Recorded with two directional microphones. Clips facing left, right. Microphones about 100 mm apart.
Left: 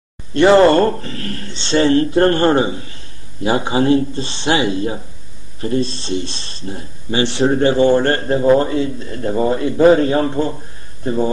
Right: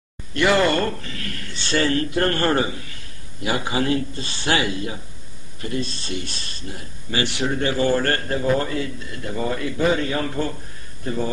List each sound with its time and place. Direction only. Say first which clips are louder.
0.3 s speech: left 9 dB; 30° left (ahead or behind)